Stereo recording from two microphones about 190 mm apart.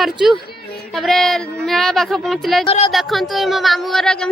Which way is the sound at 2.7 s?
30° left (ahead or behind).